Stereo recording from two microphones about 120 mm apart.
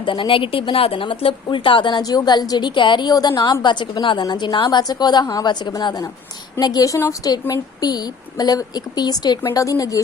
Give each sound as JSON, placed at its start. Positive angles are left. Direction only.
{"t": 0.0, "sound": "speech", "side_deg": 45}